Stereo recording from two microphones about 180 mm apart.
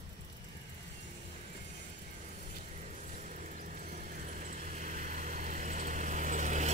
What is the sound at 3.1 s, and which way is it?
Vehicle, 45° right (ahead or behind).